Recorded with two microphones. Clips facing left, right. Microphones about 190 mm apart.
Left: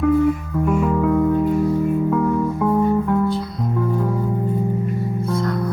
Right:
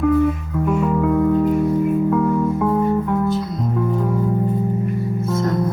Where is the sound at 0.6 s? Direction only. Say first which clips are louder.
Even; centre (ahead or behind).